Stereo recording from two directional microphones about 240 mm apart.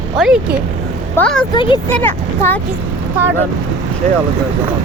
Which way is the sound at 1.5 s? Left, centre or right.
Left.